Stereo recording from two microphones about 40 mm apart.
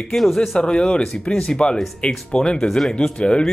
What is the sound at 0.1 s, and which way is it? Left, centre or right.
Speech, centre.